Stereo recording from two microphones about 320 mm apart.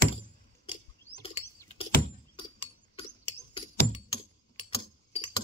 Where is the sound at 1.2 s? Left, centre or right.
Centre.